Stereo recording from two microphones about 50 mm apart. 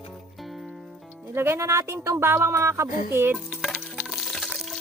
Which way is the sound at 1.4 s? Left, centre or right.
Right.